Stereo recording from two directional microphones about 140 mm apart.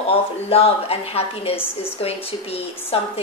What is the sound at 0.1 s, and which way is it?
A woman's voice, 45° left (ahead or behind).